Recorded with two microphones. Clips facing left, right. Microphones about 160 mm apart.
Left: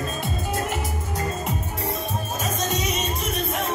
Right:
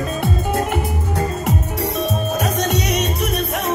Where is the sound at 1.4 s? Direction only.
75° right (ahead or behind).